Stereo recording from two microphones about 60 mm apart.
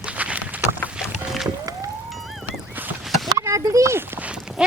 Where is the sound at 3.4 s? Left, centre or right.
Right.